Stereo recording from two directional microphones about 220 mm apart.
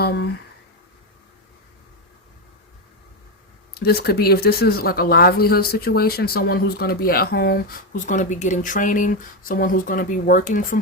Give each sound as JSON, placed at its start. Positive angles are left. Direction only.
{"t": 0.0, "sound": "speech", "side_deg": 45}
{"t": 3.8, "sound": "speech", "side_deg": 45}